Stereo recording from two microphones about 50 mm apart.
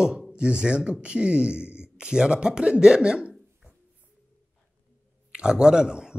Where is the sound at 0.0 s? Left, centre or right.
Centre.